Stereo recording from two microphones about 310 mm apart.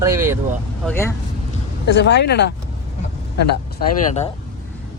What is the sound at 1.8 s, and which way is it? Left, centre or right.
Speech, left.